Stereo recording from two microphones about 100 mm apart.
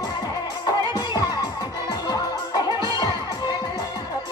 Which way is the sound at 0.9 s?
45° left (ahead or behind).